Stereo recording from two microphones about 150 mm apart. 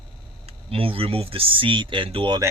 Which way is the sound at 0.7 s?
40° right (ahead or behind).